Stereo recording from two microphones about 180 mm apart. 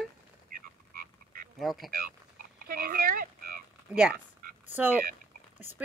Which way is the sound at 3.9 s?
5° right (ahead or behind).